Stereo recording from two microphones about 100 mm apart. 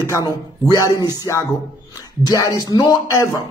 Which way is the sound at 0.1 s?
40° left (ahead or behind).